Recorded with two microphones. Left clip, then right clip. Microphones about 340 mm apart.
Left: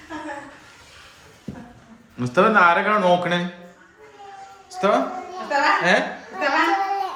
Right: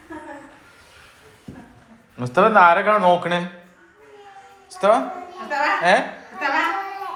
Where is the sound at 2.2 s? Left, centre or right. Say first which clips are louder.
Right 2 dB; centre.